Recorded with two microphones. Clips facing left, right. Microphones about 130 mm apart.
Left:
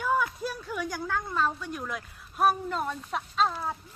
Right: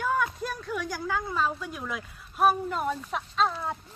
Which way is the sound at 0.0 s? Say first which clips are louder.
Even; 5° left (ahead or behind).